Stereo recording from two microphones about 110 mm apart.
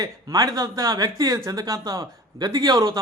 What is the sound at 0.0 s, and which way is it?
A man's voice, 35° right (ahead or behind).